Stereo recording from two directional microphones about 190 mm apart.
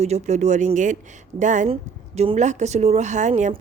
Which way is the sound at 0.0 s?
35° right (ahead or behind).